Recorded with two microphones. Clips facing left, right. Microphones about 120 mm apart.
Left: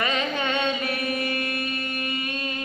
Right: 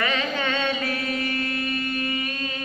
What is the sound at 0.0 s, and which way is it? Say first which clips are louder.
Mantra: even; 20° left (ahead or behind).